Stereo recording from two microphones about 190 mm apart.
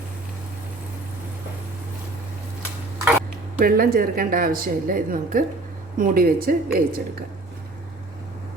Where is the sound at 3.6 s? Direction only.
50° right (ahead or behind).